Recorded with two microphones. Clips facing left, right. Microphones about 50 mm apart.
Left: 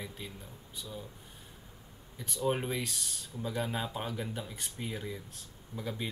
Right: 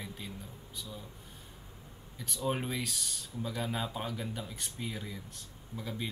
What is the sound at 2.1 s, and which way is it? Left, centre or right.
Speech, centre.